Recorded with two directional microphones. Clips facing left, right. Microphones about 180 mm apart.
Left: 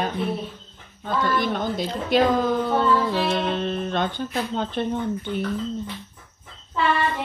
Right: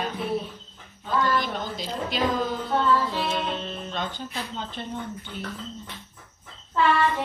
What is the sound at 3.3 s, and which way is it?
Speech, 60° left (ahead or behind).